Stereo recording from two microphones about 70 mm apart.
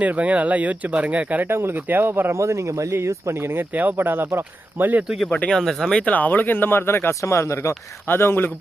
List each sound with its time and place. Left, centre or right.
0.0 s speech: centre
2.4 s speech: right
3.8 s speech: right
5.3 s speech: centre
6.1 s speech: left
8.1 s speech: left